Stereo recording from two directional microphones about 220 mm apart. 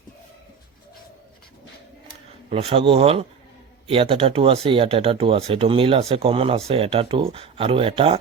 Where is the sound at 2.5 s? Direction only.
25° right (ahead or behind).